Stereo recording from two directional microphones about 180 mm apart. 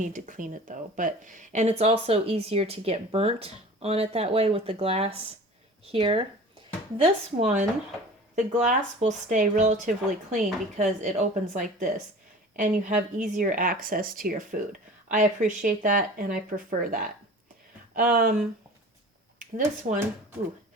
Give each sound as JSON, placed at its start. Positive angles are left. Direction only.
{"t": 0.0, "sound": "speech", "side_deg": -45}